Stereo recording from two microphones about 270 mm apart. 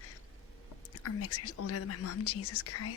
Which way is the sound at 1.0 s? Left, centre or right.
Left.